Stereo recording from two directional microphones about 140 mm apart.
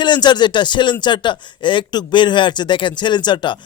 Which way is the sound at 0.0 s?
35° left (ahead or behind).